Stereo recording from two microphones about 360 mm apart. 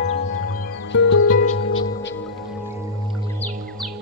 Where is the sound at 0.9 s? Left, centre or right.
Left.